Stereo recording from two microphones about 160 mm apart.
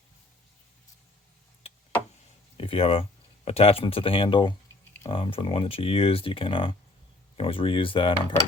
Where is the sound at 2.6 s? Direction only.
35° left (ahead or behind).